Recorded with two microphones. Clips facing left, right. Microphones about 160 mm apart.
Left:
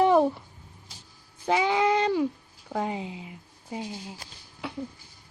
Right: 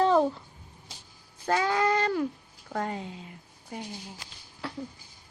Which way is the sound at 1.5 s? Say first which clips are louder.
Left 2 dB; 15° left (ahead or behind).